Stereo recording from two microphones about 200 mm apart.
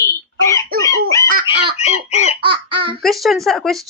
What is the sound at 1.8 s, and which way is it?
Speech, 35° left (ahead or behind).